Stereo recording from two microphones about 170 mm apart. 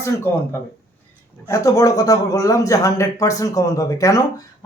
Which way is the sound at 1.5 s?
20° left (ahead or behind).